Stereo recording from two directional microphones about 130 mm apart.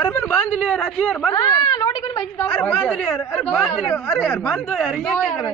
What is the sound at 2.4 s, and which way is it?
Speech, 10° left (ahead or behind).